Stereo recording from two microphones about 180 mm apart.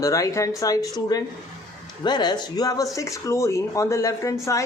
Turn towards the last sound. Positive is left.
turn(degrees=15)  # may be behind; listen again after turning